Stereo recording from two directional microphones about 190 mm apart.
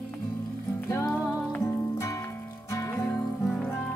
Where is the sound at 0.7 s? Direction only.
15° left (ahead or behind).